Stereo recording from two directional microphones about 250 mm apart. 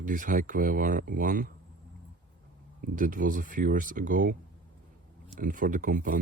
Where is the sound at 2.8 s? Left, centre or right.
Right.